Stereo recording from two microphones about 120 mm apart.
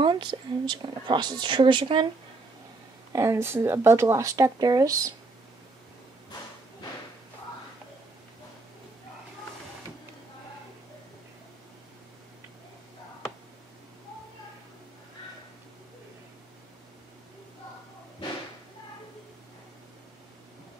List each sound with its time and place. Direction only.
0.0 s speech: 45° right (ahead or behind)
3.1 s speech: 25° right (ahead or behind)